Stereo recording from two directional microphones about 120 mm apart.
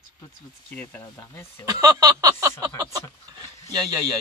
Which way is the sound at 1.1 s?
25° left (ahead or behind).